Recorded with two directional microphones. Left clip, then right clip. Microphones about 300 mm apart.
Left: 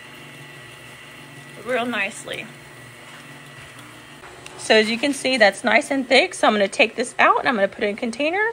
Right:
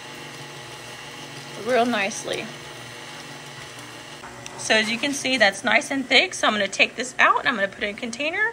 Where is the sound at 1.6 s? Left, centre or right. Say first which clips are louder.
Right 2 dB; centre.